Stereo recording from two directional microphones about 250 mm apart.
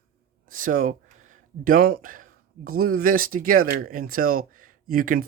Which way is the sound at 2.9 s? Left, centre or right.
Right.